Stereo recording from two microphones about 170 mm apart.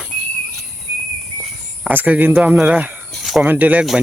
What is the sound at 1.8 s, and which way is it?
Speech, 10° right (ahead or behind).